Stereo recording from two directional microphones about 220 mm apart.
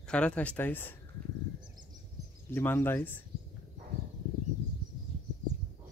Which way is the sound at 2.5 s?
10° left (ahead or behind).